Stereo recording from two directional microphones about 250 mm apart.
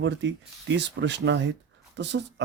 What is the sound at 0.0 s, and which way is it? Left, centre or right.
Speech, right.